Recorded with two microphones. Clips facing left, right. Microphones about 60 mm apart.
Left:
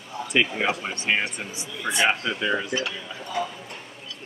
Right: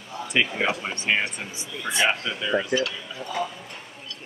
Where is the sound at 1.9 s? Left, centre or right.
Centre.